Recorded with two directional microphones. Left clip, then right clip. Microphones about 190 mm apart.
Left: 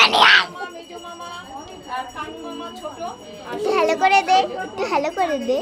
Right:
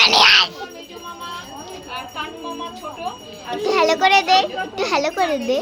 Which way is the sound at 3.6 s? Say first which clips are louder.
Right 2 dB; 5° left (ahead or behind).